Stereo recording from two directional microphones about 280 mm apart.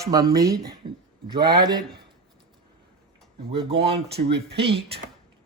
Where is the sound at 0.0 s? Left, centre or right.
Centre.